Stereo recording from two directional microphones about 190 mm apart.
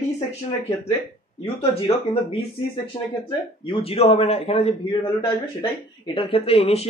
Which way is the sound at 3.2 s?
30° left (ahead or behind).